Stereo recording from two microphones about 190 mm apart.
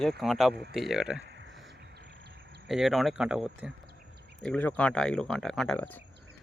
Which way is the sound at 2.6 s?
Centre (ahead or behind).